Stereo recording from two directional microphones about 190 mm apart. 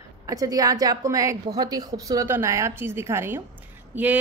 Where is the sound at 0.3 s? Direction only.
20° right (ahead or behind).